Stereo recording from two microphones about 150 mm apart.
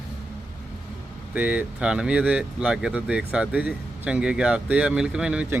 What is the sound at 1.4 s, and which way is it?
Speech, 10° right (ahead or behind).